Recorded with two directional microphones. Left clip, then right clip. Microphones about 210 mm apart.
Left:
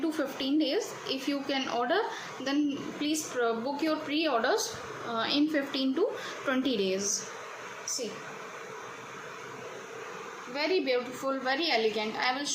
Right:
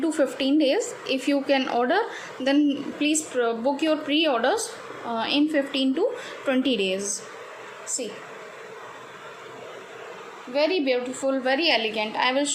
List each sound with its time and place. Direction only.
0.0 s a woman's voice: 20° right (ahead or behind)
10.5 s a woman's voice: 25° right (ahead or behind)